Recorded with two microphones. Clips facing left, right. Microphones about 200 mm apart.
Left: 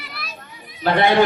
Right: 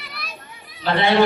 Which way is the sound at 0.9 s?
50° left (ahead or behind).